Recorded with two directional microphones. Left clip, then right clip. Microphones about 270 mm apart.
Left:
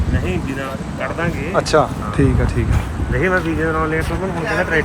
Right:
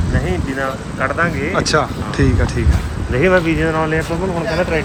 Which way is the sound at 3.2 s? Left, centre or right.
Right.